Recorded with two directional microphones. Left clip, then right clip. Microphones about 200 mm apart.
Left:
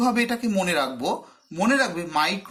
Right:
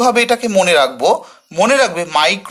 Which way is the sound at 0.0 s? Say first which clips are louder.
Right 11 dB; 35° right (ahead or behind).